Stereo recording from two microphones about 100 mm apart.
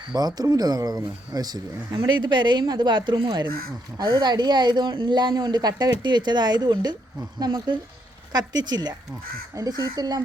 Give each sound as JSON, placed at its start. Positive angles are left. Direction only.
{"t": 0.1, "sound": "speech", "side_deg": -40}
{"t": 2.0, "sound": "speech", "side_deg": -50}